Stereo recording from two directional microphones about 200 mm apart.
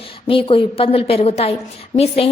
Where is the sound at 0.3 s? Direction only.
25° left (ahead or behind).